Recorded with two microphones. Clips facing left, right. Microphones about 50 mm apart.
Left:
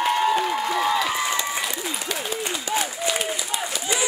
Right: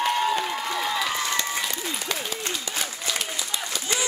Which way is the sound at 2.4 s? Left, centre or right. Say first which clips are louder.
Left 5 dB; centre.